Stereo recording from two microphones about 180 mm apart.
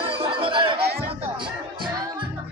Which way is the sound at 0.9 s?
60° right (ahead or behind).